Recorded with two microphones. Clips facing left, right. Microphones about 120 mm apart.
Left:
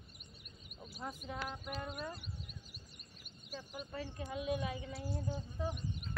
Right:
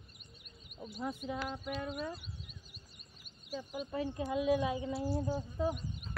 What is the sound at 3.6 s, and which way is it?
Speech, 15° right (ahead or behind).